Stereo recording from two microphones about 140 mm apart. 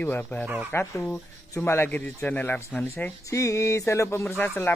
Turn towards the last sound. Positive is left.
turn(degrees=15)  # may be behind; listen again after turning